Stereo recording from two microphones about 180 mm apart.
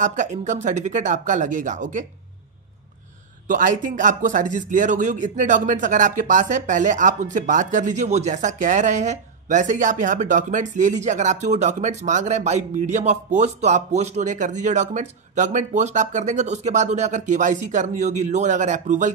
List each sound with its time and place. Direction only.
0.0 s speech: 40° right (ahead or behind)
3.4 s speech: 45° right (ahead or behind)